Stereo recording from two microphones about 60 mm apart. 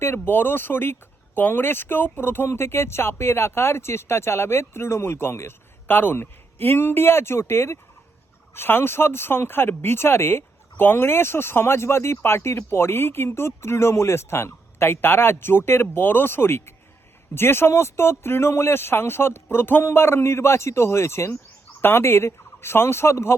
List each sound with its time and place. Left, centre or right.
0.0 s speech: left
21.8 s speech: left